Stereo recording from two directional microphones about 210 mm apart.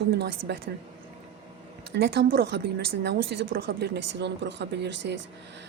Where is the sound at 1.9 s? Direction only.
50° right (ahead or behind).